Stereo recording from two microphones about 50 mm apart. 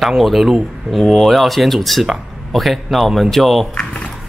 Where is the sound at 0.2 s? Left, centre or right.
Centre.